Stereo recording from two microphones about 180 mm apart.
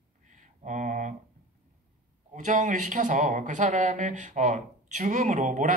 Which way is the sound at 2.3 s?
45° right (ahead or behind).